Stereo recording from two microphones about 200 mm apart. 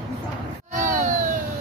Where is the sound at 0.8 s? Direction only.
40° right (ahead or behind).